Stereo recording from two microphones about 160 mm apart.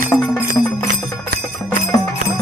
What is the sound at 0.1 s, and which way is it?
Jingle bell, 15° left (ahead or behind).